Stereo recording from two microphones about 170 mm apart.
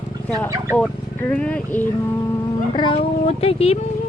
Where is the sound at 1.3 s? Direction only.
5° left (ahead or behind).